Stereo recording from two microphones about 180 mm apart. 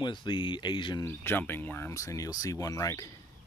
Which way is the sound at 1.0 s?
10° left (ahead or behind).